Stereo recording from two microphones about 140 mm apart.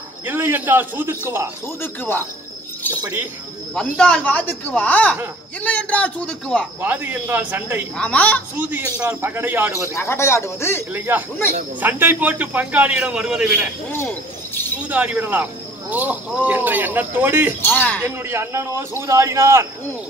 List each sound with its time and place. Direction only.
0.3 s a man's voice: 15° right (ahead or behind)
1.8 s speech: 15° left (ahead or behind)
3.7 s speech: 5° left (ahead or behind)
6.8 s a man's voice: 15° right (ahead or behind)
8.0 s speech: 10° left (ahead or behind)
8.5 s a man's voice: 15° right (ahead or behind)
9.9 s speech: 20° left (ahead or behind)
10.9 s a man's voice: 15° right (ahead or behind)
13.9 s a sound: 15° left (ahead or behind)
14.9 s a man's voice: 10° right (ahead or behind)
17.6 s speech: 15° left (ahead or behind)
18.0 s speech: 20° right (ahead or behind)